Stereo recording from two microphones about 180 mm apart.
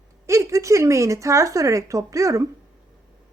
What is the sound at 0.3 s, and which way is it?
Speech, 15° right (ahead or behind).